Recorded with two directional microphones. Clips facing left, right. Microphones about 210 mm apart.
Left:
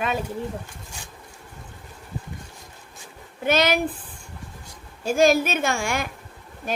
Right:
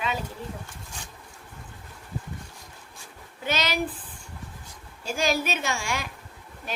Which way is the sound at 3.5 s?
50° left (ahead or behind).